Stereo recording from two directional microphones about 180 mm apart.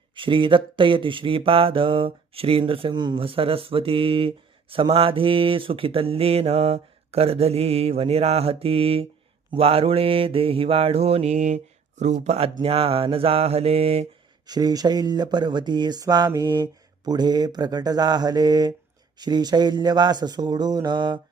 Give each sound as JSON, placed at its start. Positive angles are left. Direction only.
{"t": 0.2, "sound": "mantra", "side_deg": -25}
{"t": 14.4, "sound": "speech", "side_deg": -20}